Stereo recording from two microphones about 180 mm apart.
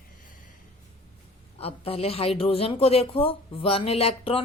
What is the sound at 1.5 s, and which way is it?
A woman's voice, 35° left (ahead or behind).